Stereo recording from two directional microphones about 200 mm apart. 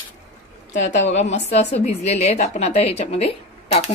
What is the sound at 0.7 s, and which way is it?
A woman's voice, 35° left (ahead or behind).